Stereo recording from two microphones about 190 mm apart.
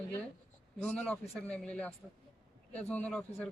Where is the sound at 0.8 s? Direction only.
5° left (ahead or behind).